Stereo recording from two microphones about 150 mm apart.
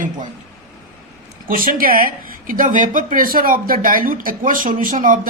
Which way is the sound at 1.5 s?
70° right (ahead or behind).